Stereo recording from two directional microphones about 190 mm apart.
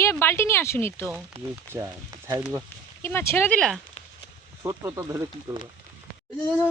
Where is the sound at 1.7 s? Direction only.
15° right (ahead or behind).